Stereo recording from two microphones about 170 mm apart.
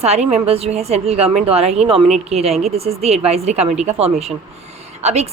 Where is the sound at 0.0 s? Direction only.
40° right (ahead or behind).